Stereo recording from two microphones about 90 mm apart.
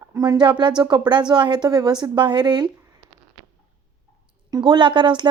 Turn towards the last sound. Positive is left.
turn(degrees=-60)  # may be behind; listen again after turning